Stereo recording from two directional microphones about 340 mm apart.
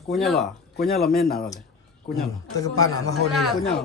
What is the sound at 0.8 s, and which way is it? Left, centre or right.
Speech, left.